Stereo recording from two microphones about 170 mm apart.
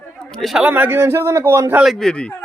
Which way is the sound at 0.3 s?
Centre (ahead or behind).